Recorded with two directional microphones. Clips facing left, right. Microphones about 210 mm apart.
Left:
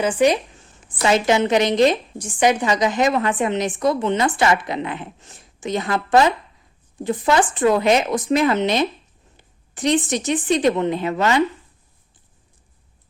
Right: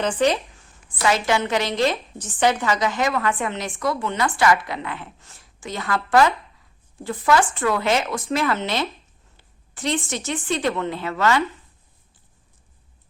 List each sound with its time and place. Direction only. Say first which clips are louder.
0.0 s a woman's voice: left 3 dB; 10° left (ahead or behind)